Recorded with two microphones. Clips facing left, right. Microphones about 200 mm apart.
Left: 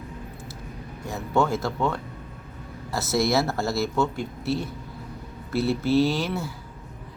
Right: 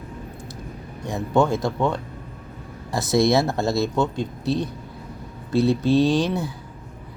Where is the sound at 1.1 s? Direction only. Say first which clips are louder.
Right 4 dB; 15° right (ahead or behind).